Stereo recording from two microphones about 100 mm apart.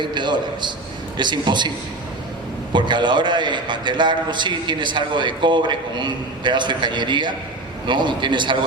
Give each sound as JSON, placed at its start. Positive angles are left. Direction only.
{"t": 0.0, "sound": "a man's voice", "side_deg": -50}
{"t": 2.7, "sound": "a man's voice", "side_deg": -50}